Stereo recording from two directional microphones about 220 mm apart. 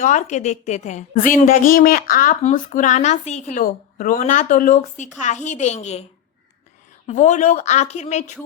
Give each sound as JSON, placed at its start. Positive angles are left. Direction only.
{"t": 0.0, "sound": "speech", "side_deg": 35}
{"t": 7.1, "sound": "speech", "side_deg": 35}